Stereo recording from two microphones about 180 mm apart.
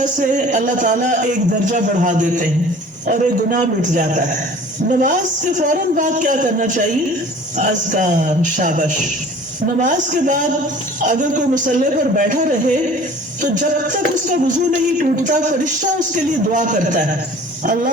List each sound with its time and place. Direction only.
0.0 s a man's voice: 45° right (ahead or behind)